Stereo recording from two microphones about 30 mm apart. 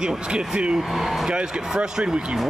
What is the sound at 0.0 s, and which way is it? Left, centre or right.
Speech, right.